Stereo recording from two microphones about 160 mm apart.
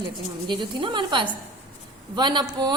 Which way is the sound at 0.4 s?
30° right (ahead or behind).